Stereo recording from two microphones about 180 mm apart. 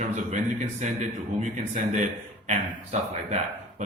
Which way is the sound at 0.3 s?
40° right (ahead or behind).